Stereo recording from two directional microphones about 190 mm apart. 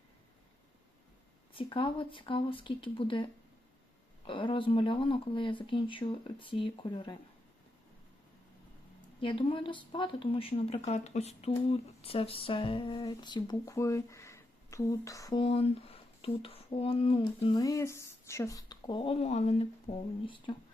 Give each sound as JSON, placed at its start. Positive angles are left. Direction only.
{"t": 1.5, "sound": "speech", "side_deg": 25}
{"t": 4.3, "sound": "speech", "side_deg": 25}
{"t": 9.2, "sound": "speech", "side_deg": 25}